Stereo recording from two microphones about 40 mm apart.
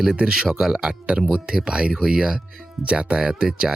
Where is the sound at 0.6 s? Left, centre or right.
Centre.